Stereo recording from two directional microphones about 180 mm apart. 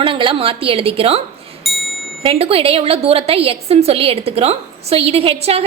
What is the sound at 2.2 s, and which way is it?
A woman's voice, 30° right (ahead or behind).